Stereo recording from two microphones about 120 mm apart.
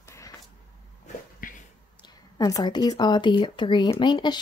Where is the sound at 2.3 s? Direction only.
30° left (ahead or behind).